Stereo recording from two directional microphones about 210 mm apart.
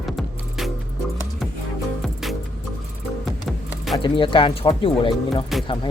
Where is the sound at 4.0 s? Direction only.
25° left (ahead or behind).